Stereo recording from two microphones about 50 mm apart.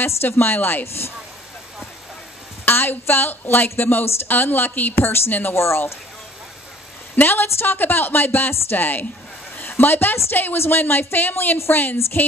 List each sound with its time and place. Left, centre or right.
0.0 s speech: left
2.6 s speech: left
5.5 s speech: left
7.2 s speech: left
9.6 s a sound: left
10.3 s a woman's voice: left